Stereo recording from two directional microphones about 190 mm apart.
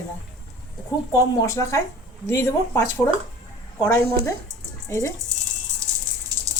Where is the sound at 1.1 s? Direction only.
15° left (ahead or behind).